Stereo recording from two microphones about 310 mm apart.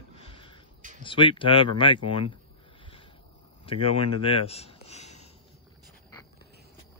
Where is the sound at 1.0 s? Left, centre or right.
Centre.